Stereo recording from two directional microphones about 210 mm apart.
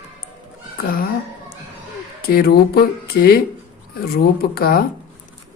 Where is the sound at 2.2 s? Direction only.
50° left (ahead or behind).